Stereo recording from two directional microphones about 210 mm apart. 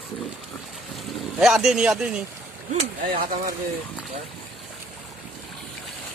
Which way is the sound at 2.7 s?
30° right (ahead or behind).